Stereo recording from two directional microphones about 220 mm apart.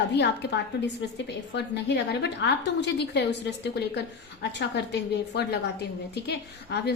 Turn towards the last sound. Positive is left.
turn(degrees=50)  # may be behind; listen again after turning